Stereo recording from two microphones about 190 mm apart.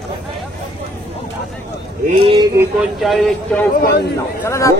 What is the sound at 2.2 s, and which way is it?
Speech, 30° right (ahead or behind).